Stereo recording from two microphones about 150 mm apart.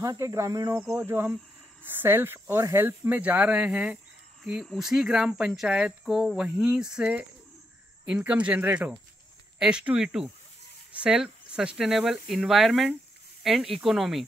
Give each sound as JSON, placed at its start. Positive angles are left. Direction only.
{"t": 0.0, "sound": "speech", "side_deg": -20}